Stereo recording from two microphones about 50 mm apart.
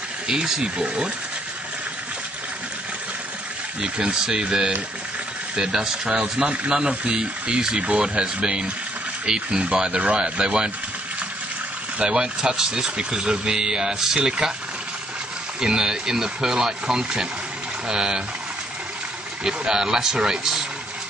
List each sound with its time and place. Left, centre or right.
0.3 s speech: centre
3.8 s speech: centre
6.4 s speech: right
12.0 s speech: centre
15.6 s speech: centre
19.4 s speech: centre